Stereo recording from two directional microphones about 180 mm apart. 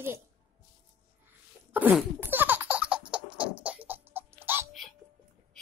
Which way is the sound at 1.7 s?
10° right (ahead or behind).